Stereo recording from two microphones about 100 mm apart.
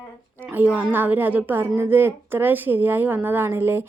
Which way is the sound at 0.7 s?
15° right (ahead or behind).